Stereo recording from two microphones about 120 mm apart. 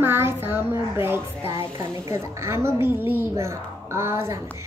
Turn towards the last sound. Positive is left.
turn(degrees=-25)  # may be behind; listen again after turning